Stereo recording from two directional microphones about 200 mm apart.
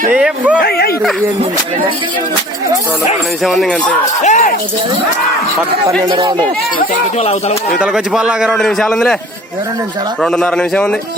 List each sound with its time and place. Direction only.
0.1 s a sound: 5° right (ahead or behind)
0.6 s a sound: 50° left (ahead or behind)
3.4 s a man's voice: centre (ahead or behind)
4.2 s music: 35° left (ahead or behind)
6.0 s speech: 25° right (ahead or behind)
6.7 s speech: 45° left (ahead or behind)
7.8 s a man's voice: 5° right (ahead or behind)
10.2 s a man's voice: 5° left (ahead or behind)